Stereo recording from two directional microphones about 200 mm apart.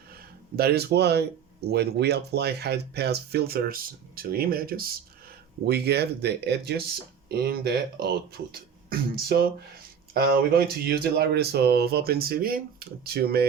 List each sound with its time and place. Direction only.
0.1 s speech: 50° right (ahead or behind)